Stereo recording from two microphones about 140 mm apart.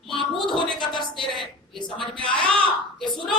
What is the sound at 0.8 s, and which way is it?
Speech, 35° left (ahead or behind).